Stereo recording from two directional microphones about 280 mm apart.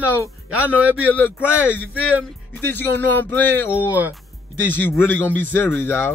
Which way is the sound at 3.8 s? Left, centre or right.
Centre.